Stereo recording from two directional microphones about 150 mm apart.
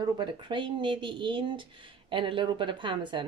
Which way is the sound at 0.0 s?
30° right (ahead or behind).